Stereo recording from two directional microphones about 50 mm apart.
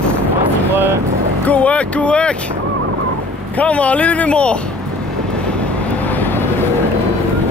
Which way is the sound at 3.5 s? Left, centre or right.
Left.